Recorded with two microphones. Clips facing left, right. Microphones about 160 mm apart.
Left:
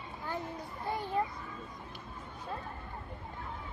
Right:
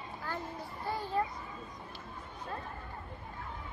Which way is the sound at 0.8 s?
20° left (ahead or behind).